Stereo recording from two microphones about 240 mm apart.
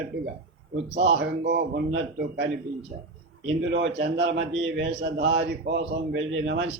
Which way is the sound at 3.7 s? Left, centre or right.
Right.